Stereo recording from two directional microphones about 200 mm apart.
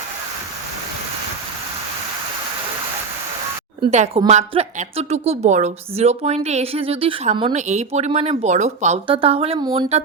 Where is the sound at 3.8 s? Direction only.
30° right (ahead or behind).